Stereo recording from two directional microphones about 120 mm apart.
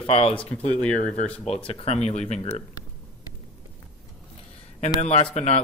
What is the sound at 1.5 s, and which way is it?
Speech, 55° left (ahead or behind).